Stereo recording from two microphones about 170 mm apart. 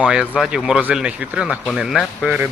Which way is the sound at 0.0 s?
5° right (ahead or behind).